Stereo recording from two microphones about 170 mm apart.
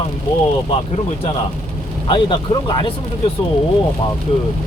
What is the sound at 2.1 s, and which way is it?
Speech, 30° left (ahead or behind).